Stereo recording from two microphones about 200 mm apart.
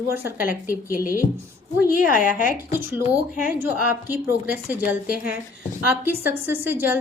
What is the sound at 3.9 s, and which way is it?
A woman's voice, 10° right (ahead or behind).